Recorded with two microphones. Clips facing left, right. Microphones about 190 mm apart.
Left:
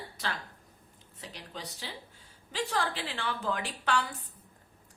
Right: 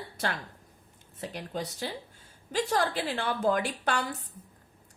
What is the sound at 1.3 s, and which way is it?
A woman's voice, 50° right (ahead or behind).